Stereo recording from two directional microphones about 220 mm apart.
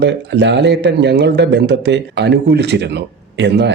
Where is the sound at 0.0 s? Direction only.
50° right (ahead or behind).